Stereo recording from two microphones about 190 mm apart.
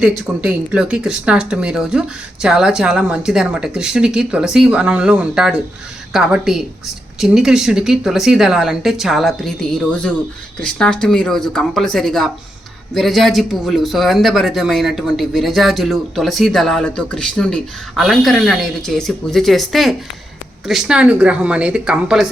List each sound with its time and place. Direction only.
0.4 s speech: 5° right (ahead or behind)